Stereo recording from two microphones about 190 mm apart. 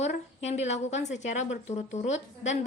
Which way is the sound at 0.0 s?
35° left (ahead or behind).